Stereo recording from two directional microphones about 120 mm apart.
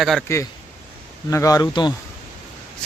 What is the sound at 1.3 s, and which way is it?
Speech, 30° left (ahead or behind).